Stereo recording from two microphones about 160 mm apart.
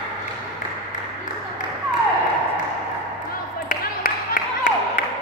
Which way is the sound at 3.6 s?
60° left (ahead or behind).